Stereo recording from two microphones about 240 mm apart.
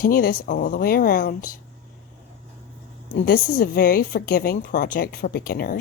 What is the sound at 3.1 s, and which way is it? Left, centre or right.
A woman's voice, left.